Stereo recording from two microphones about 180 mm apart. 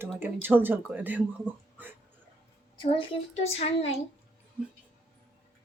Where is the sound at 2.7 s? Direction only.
30° left (ahead or behind).